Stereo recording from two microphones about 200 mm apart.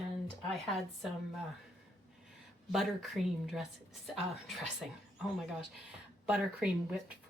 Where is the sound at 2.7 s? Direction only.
Centre (ahead or behind).